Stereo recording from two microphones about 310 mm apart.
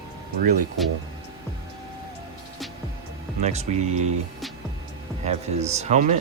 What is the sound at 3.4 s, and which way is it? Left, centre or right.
Speech, right.